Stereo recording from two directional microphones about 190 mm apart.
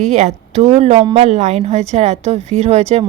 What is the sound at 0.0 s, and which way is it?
A woman's voice, 35° right (ahead or behind).